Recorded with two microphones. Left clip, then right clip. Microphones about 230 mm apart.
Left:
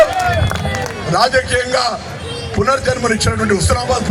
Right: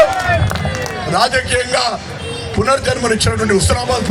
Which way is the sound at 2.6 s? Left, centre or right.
Right.